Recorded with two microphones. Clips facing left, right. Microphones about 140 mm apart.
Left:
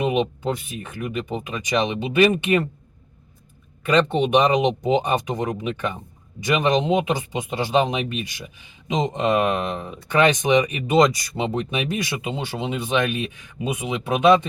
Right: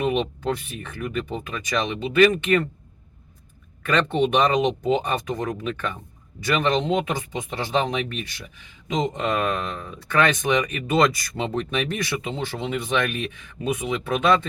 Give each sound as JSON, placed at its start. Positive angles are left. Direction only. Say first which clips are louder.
{"t": 0.0, "sound": "speech", "louder": "left 2 dB", "side_deg": 15}
{"t": 3.8, "sound": "speech", "louder": "left 2 dB", "side_deg": 15}